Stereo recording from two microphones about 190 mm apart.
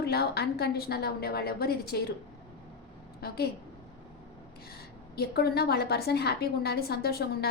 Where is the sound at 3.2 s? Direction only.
55° left (ahead or behind).